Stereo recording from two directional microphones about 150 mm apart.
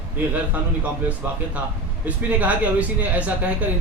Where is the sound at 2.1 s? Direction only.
10° right (ahead or behind).